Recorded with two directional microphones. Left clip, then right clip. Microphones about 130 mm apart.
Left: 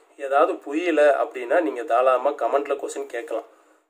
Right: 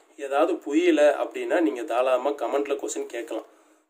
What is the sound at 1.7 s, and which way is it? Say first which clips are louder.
A man's voice: left 4 dB; 5° right (ahead or behind).